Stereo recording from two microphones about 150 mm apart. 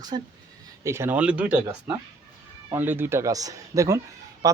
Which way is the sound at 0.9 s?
15° right (ahead or behind).